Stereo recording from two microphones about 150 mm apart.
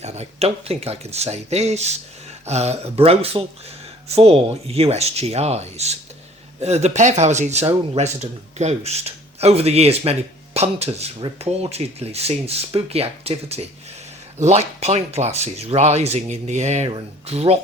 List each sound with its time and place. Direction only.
0.0 s speech: 45° right (ahead or behind)